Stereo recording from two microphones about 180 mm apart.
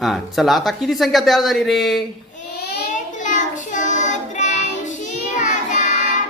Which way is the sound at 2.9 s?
45° left (ahead or behind).